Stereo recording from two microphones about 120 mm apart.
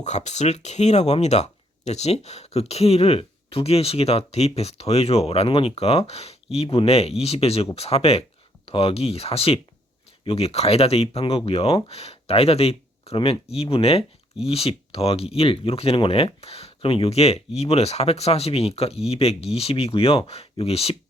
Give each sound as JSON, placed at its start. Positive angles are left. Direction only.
{"t": 0.0, "sound": "speech", "side_deg": 70}